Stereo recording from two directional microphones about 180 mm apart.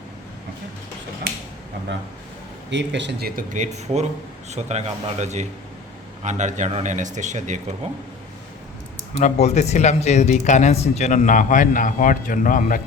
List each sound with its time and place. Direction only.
2.6 s a man's voice: 80° right; by 7.6 s 40° right (ahead or behind)
9.2 s speech: 40° left (ahead or behind)